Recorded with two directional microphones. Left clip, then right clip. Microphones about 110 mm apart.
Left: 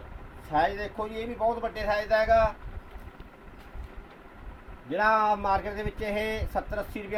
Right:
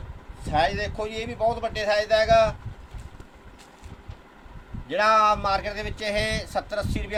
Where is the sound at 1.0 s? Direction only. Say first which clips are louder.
Right 3 dB; 15° right (ahead or behind).